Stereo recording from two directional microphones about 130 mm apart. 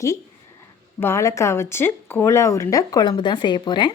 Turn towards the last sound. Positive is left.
turn(degrees=35)  # may be behind; listen again after turning